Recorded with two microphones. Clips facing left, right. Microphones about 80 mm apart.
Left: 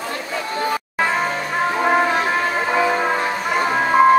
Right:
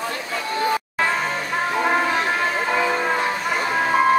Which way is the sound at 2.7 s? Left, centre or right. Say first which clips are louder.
Left 5 dB; centre.